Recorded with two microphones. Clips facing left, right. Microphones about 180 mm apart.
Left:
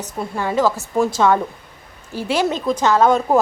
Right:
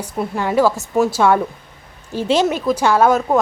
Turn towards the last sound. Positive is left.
turn(degrees=-5)  # may be behind; listen again after turning